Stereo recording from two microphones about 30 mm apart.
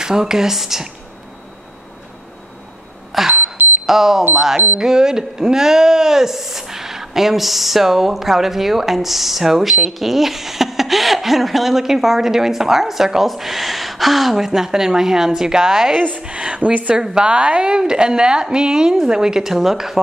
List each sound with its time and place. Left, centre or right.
0.0 s speech: right
3.1 s speech: centre
3.8 s a sound: centre
4.7 s speech: centre
16.2 s speech: right
16.9 s a woman's voice: right
17.2 s speech: right
17.6 s a woman's voice: right
19.4 s speech: centre